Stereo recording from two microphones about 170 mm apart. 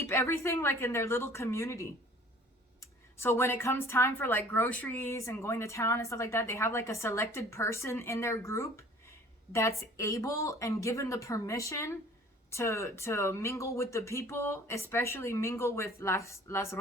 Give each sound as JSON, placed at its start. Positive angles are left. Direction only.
{"t": 0.0, "sound": "speech", "side_deg": 15}